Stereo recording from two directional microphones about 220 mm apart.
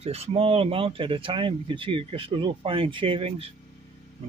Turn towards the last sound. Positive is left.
turn(degrees=-25)  # may be behind; listen again after turning